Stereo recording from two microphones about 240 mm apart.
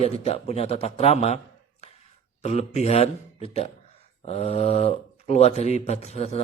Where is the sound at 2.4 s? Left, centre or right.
Left.